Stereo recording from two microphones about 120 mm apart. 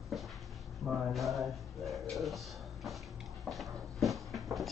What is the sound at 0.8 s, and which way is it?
Speech, centre (ahead or behind).